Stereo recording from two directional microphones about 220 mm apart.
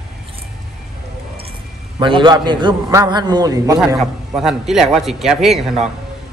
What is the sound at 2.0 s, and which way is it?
A man's voice, 20° right (ahead or behind).